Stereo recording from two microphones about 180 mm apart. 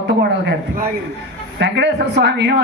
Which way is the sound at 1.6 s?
70° right (ahead or behind).